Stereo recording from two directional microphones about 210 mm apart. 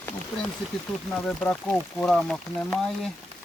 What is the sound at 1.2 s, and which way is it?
Speech, 5° left (ahead or behind).